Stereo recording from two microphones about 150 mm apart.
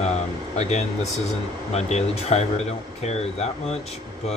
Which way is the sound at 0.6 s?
50° left (ahead or behind).